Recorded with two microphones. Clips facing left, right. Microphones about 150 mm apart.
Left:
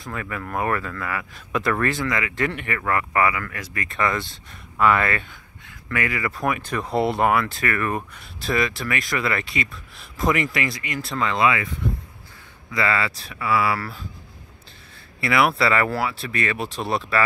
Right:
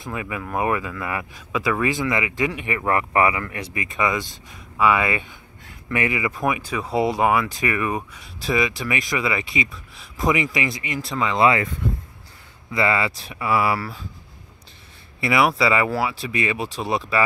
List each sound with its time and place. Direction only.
0.0 s speech: 15° right (ahead or behind)
1.5 s speech: 5° right (ahead or behind)
11.3 s speech: 30° right (ahead or behind)
12.7 s speech: 20° right (ahead or behind)
15.1 s speech: 15° right (ahead or behind)